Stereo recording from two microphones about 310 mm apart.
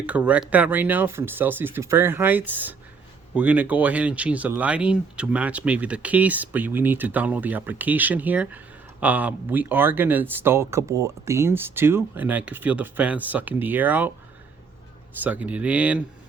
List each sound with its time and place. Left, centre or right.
0.0 s speech: centre
15.2 s speech: centre